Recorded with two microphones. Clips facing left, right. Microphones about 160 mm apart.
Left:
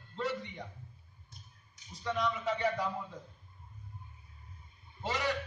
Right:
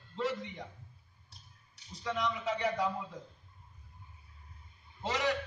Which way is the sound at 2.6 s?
20° right (ahead or behind).